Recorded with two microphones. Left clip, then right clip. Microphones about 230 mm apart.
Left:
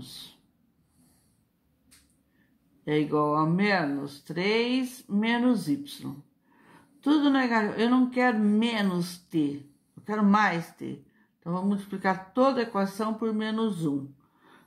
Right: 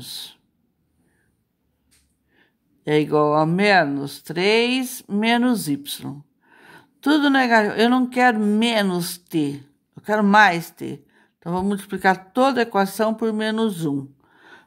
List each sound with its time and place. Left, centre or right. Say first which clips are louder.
0.0 s owl: right 10 dB; right
2.8 s speech: right 8 dB; right